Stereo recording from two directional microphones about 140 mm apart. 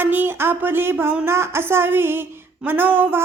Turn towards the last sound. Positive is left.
turn(degrees=-15)  # may be behind; listen again after turning